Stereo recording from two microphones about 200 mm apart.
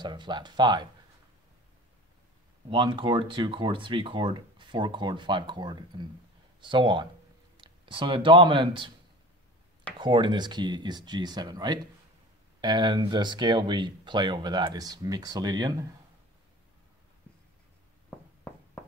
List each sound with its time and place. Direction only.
0.0 s speech: 20° right (ahead or behind)
2.7 s speech: 25° right (ahead or behind)
9.9 s speech: 25° right (ahead or behind)